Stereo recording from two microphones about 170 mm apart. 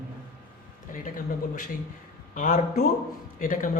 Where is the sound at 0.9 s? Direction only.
50° left (ahead or behind).